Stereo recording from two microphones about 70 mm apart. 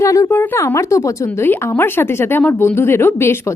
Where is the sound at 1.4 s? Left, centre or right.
Left.